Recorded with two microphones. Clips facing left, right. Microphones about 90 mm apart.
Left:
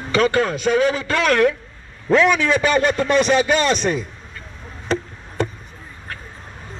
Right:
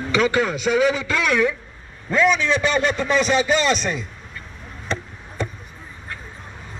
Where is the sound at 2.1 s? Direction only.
80° left.